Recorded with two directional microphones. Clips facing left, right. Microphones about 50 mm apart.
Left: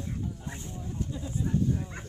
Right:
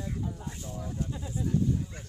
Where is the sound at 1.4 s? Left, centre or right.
Left.